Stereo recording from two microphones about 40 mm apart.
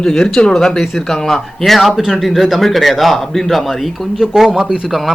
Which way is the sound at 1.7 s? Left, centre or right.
Centre.